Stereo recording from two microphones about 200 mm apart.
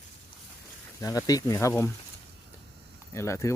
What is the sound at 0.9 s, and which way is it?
Speech, 15° left (ahead or behind).